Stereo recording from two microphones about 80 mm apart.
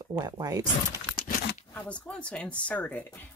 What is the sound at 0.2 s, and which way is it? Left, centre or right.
Speech, right.